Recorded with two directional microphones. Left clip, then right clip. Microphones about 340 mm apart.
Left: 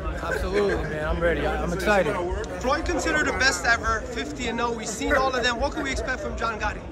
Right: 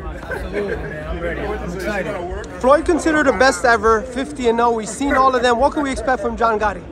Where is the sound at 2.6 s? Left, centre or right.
Centre.